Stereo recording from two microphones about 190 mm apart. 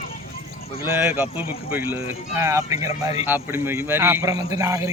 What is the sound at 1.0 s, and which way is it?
Speech, 10° right (ahead or behind).